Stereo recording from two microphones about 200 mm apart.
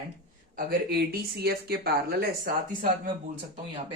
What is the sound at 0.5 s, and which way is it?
Speech, 50° right (ahead or behind).